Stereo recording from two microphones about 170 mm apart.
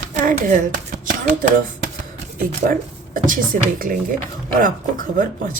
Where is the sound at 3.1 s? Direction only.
50° right (ahead or behind).